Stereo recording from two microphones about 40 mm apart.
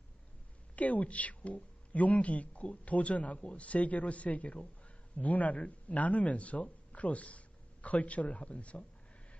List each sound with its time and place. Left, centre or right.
0.8 s a woman's voice: left